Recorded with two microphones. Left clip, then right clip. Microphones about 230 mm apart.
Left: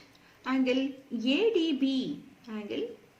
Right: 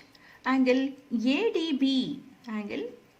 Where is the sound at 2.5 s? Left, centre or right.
Right.